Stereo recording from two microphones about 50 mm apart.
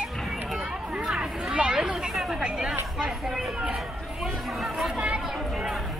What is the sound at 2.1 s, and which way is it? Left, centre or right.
Hubbub, centre.